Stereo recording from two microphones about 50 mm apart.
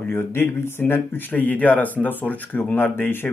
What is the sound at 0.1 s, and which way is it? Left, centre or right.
Speech, left.